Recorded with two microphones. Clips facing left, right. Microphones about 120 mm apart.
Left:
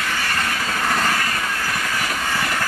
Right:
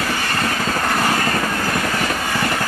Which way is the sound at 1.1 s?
35° right (ahead or behind).